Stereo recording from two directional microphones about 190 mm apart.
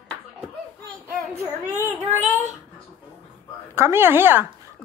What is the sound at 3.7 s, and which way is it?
Speech, 10° right (ahead or behind).